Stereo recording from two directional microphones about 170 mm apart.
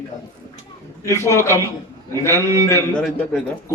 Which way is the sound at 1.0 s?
15° left (ahead or behind).